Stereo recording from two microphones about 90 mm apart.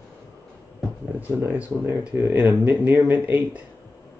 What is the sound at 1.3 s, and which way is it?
Speech, 30° right (ahead or behind).